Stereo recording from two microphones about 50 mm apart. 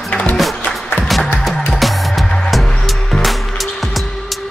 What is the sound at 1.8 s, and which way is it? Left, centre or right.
Music, centre.